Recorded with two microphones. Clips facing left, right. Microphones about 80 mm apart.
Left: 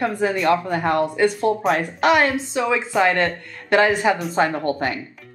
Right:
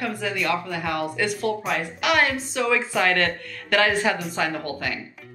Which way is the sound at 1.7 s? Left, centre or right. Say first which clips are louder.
Left 6 dB; left.